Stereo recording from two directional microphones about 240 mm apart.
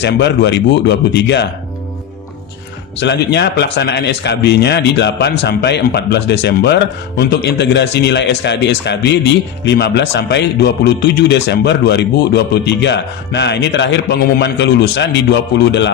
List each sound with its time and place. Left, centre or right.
0.0 s speech: left
3.0 s speech: left